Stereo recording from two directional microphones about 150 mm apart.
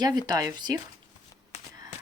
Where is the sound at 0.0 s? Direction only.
25° right (ahead or behind).